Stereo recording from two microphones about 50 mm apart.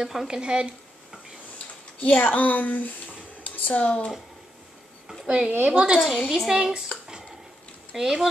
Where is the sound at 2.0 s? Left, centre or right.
Left.